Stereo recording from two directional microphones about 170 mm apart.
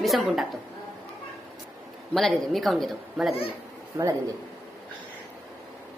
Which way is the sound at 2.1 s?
Centre (ahead or behind).